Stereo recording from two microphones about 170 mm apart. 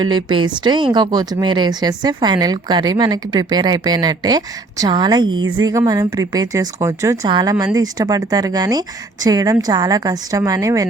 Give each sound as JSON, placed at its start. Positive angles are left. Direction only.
{"t": 0.0, "sound": "speech", "side_deg": -25}